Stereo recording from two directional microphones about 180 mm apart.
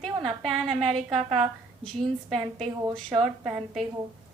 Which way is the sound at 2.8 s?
25° right (ahead or behind).